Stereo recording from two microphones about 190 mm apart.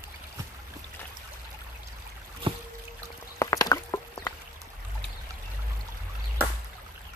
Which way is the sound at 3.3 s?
20° left (ahead or behind).